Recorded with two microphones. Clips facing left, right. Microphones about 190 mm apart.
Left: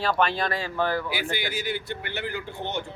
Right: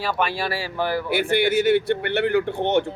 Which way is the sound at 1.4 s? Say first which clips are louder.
Right 12 dB; 65° right (ahead or behind).